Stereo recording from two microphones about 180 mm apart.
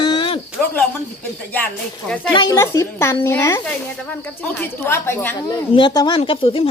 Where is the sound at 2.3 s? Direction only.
20° left (ahead or behind).